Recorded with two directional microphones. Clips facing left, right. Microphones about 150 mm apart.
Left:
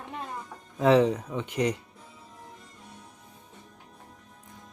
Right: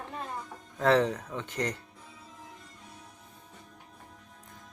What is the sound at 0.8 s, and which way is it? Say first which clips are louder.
Speech: left 4 dB; 15° left (ahead or behind).